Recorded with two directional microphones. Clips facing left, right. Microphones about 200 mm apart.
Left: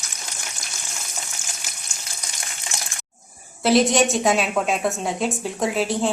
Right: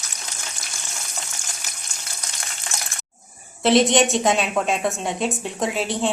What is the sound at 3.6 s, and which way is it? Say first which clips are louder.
A woman's voice: right 1 dB; centre (ahead or behind).